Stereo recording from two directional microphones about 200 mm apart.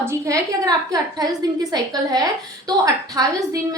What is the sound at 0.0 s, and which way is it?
A woman's voice, 15° right (ahead or behind).